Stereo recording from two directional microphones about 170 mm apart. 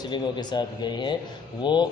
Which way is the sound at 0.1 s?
25° left (ahead or behind).